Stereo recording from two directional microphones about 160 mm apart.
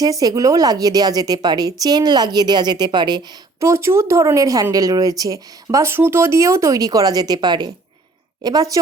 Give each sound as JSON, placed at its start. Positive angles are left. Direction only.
{"t": 0.0, "sound": "speech", "side_deg": -20}
{"t": 3.6, "sound": "speech", "side_deg": -15}